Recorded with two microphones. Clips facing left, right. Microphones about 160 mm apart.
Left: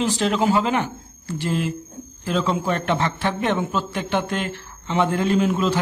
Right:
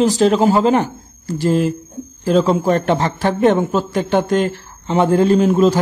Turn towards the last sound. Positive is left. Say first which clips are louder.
# right 7 dB
turn(degrees=-40)  # may be behind; listen again after turning